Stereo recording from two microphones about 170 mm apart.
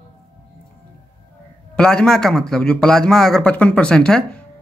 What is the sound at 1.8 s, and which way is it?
Speech, 5° left (ahead or behind).